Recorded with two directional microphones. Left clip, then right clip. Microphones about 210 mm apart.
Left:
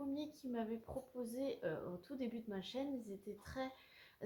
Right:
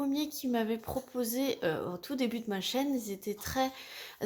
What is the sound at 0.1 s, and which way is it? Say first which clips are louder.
Speech: right 12 dB; 50° right (ahead or behind).